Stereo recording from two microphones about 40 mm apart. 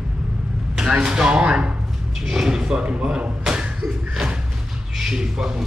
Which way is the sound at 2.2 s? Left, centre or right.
Centre.